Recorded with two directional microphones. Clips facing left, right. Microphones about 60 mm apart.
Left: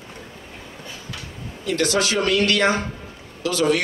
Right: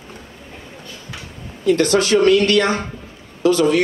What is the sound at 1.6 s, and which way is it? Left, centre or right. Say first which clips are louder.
Speech: right 7 dB; right.